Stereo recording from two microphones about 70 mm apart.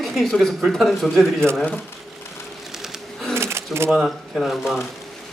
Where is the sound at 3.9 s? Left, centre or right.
Centre.